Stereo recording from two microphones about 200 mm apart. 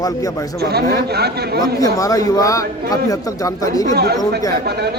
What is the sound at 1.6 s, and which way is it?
A man's voice, 15° left (ahead or behind).